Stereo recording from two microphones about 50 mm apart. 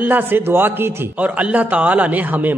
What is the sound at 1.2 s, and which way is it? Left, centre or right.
A man's voice, right.